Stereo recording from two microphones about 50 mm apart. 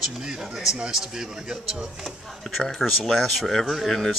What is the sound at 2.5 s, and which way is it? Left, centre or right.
Speech, centre.